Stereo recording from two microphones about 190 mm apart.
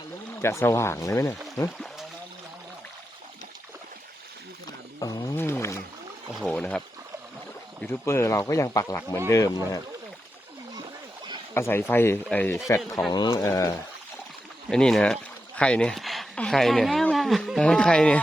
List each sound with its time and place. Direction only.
0.4 s speech: 15° left (ahead or behind)
4.9 s a sound: 20° left (ahead or behind)
6.4 s speech: 5° left (ahead or behind)
11.5 s speech: 10° left (ahead or behind)
13.1 s speech: 20° left (ahead or behind)
14.7 s speech: 5° left (ahead or behind)